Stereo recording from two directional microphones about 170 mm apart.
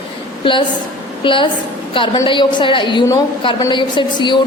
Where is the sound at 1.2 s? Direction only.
30° left (ahead or behind).